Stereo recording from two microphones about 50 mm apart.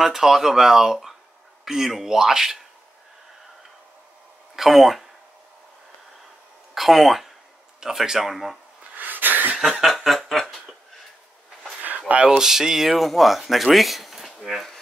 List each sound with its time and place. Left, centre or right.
0.0 s speech: centre
4.6 s speech: centre
6.7 s speech: centre
8.9 s sneeze: right
9.6 s snicker: centre
12.3 s speech: centre